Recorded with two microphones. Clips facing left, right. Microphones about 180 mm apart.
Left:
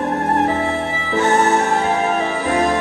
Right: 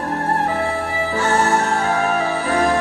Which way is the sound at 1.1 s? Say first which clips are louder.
Left 3 dB; 25° left (ahead or behind).